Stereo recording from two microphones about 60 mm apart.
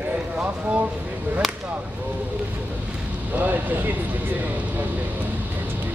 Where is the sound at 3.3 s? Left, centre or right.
Right.